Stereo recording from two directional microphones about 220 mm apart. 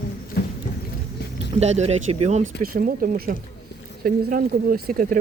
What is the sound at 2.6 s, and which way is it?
Speech, 40° right (ahead or behind).